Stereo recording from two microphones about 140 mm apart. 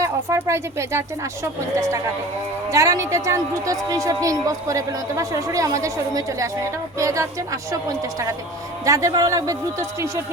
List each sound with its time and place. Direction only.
0.0 s a woman's voice: 20° right (ahead or behind)
8.8 s a woman's voice: 25° right (ahead or behind)